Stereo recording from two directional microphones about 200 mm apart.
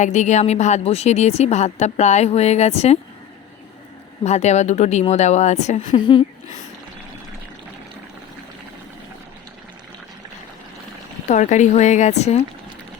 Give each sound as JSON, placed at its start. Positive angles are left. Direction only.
{"t": 0.0, "sound": "a woman's voice", "side_deg": 35}
{"t": 4.2, "sound": "a woman's voice", "side_deg": 35}
{"t": 6.0, "sound": "speech", "side_deg": 25}
{"t": 11.3, "sound": "a woman's voice", "side_deg": 35}